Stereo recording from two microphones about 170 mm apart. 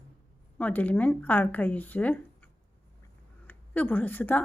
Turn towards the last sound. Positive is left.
turn(degrees=10)  # may be behind; listen again after turning